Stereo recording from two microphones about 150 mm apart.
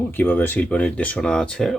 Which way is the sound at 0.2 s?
10° left (ahead or behind).